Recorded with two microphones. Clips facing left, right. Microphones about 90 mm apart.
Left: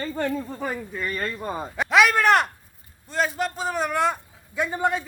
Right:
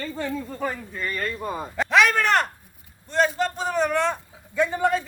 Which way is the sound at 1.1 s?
35° left (ahead or behind).